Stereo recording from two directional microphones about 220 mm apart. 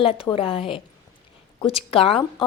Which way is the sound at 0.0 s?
25° left (ahead or behind).